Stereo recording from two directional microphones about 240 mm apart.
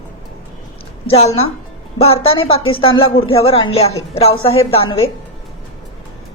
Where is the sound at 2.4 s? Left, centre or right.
Left.